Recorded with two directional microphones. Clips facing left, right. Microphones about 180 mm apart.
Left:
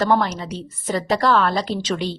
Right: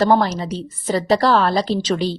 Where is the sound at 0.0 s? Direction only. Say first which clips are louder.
Right 3 dB; 35° right (ahead or behind).